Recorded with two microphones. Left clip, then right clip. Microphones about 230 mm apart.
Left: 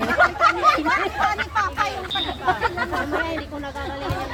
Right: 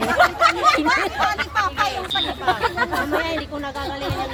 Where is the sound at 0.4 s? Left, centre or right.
Right.